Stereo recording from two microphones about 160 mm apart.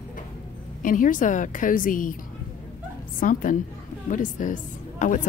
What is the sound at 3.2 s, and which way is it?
Speech, 55° left (ahead or behind).